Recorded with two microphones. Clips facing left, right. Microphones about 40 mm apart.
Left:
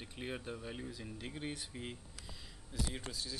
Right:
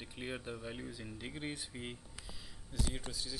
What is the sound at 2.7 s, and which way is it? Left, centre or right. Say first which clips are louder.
Speech: right 1 dB; centre.